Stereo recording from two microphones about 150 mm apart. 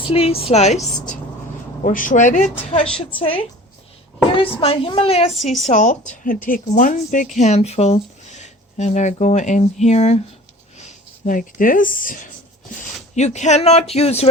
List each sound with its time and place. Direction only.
0.1 s a woman's voice: 40° left (ahead or behind)
1.8 s speech: 60° left (ahead or behind)
3.2 s a woman's voice: 35° left (ahead or behind)
5.6 s a woman's voice: 55° left (ahead or behind)
13.1 s a woman's voice: 50° left (ahead or behind)